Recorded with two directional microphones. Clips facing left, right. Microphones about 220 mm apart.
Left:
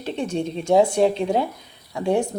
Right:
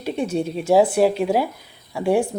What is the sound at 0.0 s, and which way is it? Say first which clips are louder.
Speech: right 2 dB; 10° right (ahead or behind).